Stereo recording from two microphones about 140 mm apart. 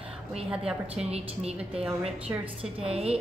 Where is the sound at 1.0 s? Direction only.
50° right (ahead or behind).